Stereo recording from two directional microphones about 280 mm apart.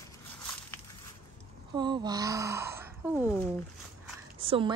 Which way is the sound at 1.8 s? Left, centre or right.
Centre.